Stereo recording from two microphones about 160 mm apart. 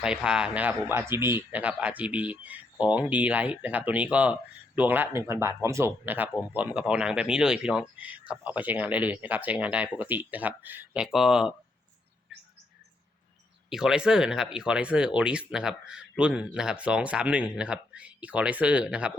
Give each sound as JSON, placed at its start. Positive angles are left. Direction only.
{"t": 0.0, "sound": "a man's voice", "side_deg": -5}
{"t": 13.7, "sound": "a man's voice", "side_deg": -5}